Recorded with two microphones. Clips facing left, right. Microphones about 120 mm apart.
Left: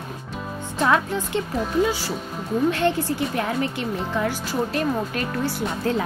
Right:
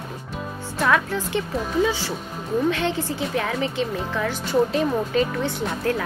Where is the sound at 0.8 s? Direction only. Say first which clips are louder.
Even; 15° left (ahead or behind).